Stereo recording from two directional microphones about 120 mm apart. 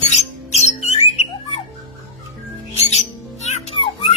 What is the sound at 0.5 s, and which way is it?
Music, 65° left (ahead or behind).